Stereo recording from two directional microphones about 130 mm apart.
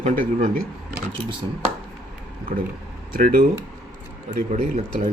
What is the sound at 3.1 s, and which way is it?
Speech, 90° right.